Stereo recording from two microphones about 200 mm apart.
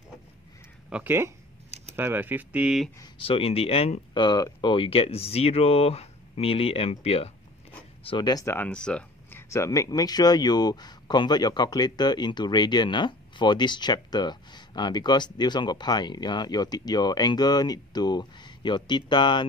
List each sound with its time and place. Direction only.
0.8 s speech: 10° right (ahead or behind)
3.0 s speech: 25° left (ahead or behind)